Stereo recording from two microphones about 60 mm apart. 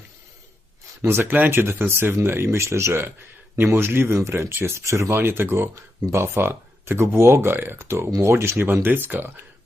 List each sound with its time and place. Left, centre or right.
1.0 s speech: right
8.6 s speech: right